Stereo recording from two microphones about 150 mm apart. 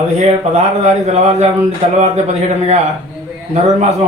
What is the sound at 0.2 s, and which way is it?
A man's voice, 50° right (ahead or behind).